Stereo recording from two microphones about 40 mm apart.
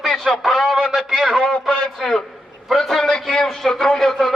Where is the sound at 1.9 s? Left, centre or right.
Centre.